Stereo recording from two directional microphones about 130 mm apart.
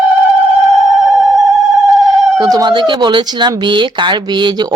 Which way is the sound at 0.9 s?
5° right (ahead or behind).